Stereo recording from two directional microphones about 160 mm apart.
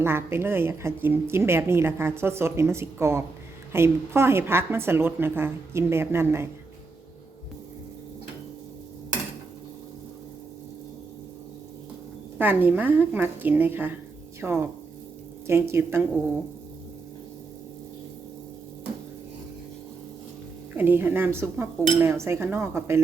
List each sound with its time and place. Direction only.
0.0 s speech: 15° right (ahead or behind)
12.4 s speech: 10° right (ahead or behind)
20.7 s speech: 10° right (ahead or behind)